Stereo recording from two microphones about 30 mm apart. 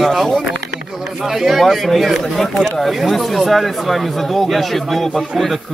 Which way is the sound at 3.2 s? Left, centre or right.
Centre.